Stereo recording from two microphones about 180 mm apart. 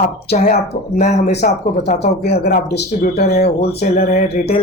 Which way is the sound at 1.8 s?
60° left (ahead or behind).